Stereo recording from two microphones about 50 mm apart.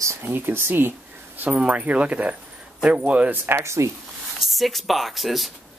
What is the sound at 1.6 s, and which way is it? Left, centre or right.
Speech, right.